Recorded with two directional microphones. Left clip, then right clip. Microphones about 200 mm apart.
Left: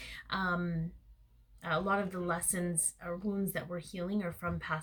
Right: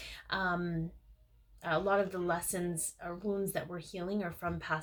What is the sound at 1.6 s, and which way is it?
Speech, 35° right (ahead or behind).